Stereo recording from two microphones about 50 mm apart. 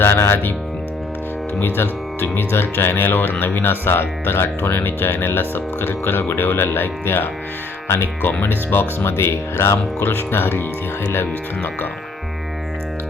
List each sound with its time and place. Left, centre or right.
0.0 s speech: left
1.6 s speech: left